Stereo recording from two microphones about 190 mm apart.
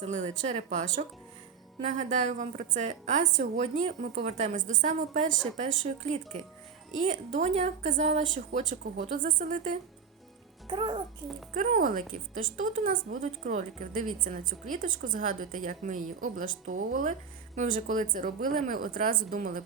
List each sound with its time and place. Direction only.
0.0 s a woman's voice: 40° right (ahead or behind)
7.3 s a woman's voice: 35° right (ahead or behind)
10.7 s a child's voice: 25° right (ahead or behind)
11.5 s a woman's voice: 45° right (ahead or behind)